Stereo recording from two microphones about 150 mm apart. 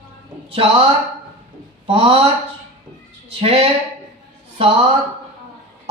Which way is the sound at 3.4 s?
40° right (ahead or behind).